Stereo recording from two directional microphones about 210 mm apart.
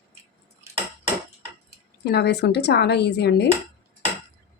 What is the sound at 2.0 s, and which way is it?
Speech, 50° left (ahead or behind).